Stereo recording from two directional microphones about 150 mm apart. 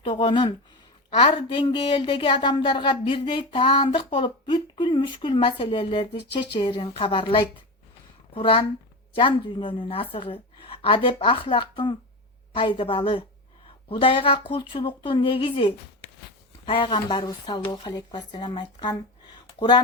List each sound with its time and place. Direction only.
0.0 s a woman's voice: 35° left (ahead or behind)